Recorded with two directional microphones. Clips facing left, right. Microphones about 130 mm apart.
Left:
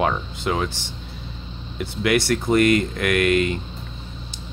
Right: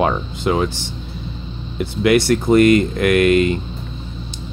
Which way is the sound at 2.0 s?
25° right (ahead or behind).